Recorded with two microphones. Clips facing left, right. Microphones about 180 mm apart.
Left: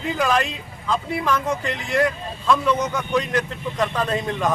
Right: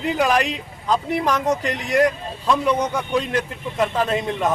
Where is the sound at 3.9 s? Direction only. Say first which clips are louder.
Right 2 dB; 25° right (ahead or behind).